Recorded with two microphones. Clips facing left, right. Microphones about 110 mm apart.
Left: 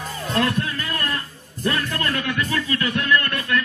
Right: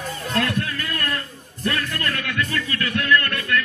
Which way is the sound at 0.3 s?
25° left (ahead or behind).